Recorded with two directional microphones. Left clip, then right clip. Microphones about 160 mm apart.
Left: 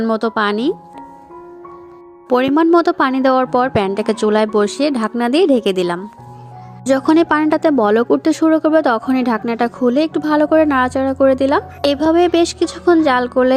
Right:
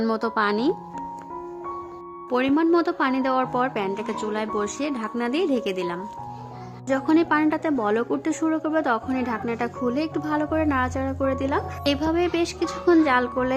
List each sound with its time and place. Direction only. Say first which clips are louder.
0.1 s a woman's voice: left 8 dB; 30° left (ahead or behind)
2.3 s speech: left 8 dB; 40° left (ahead or behind)